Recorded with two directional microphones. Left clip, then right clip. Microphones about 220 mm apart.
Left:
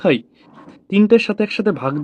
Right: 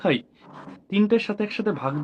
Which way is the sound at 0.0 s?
40° left (ahead or behind).